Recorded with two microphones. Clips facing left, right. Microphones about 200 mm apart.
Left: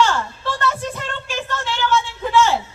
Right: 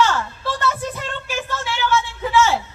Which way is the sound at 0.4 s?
10° right (ahead or behind).